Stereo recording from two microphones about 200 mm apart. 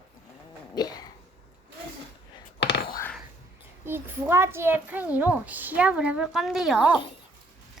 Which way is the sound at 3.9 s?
10° right (ahead or behind).